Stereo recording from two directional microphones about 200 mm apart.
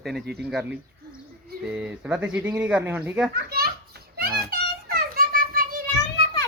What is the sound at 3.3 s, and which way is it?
Children playing, 50° right (ahead or behind).